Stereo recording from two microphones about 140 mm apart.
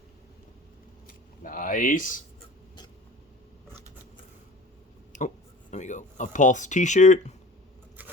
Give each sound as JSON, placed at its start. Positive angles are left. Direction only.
{"t": 1.0, "sound": "speech", "side_deg": 75}
{"t": 5.1, "sound": "a sound", "side_deg": 65}
{"t": 5.7, "sound": "speech", "side_deg": 60}